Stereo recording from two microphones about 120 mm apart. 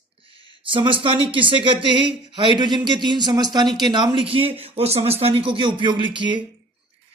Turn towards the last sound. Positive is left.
turn(degrees=-40)  # may be behind; listen again after turning